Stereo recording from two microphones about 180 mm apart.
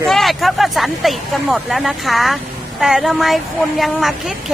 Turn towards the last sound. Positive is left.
turn(degrees=0)  # may be behind; listen again after turning